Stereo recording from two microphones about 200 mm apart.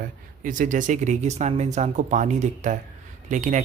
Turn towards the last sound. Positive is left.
turn(degrees=-40)  # may be behind; listen again after turning